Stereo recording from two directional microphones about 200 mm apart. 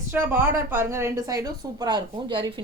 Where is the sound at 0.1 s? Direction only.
10° right (ahead or behind).